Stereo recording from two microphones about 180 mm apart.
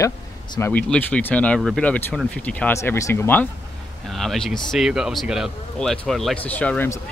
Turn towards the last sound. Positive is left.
turn(degrees=10)  # may be behind; listen again after turning